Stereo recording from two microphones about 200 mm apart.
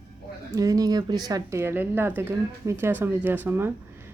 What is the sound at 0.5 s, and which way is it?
Speech, 15° right (ahead or behind).